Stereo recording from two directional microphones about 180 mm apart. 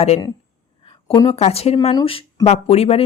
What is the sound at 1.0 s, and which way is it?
Speech, 30° left (ahead or behind).